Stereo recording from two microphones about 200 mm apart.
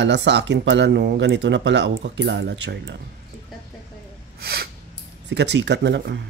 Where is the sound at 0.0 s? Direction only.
60° right (ahead or behind).